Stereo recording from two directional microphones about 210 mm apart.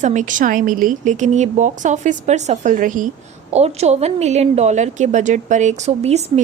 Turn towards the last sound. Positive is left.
turn(degrees=-30)  # may be behind; listen again after turning